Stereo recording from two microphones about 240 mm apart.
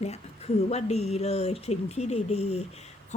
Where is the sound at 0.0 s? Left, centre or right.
Left.